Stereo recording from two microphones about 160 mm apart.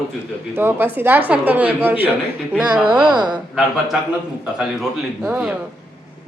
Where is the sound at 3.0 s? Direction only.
30° right (ahead or behind).